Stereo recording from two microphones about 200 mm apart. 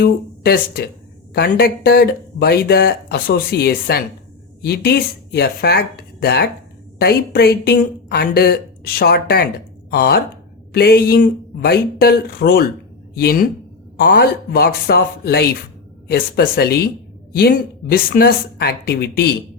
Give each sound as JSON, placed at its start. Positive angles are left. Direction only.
{"t": 0.0, "sound": "speech", "side_deg": 50}